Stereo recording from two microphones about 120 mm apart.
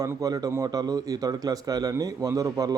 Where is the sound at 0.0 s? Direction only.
30° right (ahead or behind).